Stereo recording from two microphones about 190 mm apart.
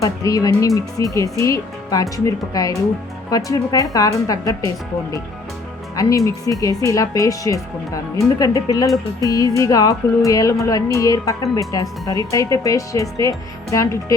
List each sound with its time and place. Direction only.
0.0 s speech: 15° left (ahead or behind)
6.0 s speech: 15° left (ahead or behind)